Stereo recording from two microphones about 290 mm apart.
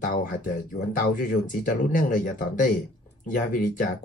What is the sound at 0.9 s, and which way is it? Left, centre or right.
Speech, left.